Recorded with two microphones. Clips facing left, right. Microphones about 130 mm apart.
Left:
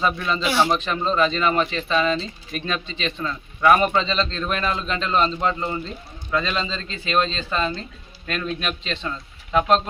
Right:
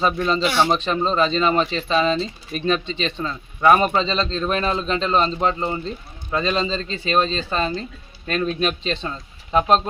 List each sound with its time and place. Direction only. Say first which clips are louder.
0.0 s a man's voice: right 3 dB; 35° right (ahead or behind)